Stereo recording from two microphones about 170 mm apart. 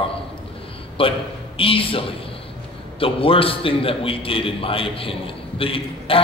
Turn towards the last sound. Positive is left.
turn(degrees=30)  # may be behind; listen again after turning